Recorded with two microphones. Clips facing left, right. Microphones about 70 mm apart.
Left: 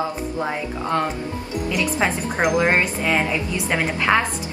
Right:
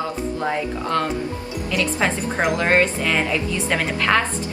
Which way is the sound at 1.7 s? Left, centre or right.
Centre.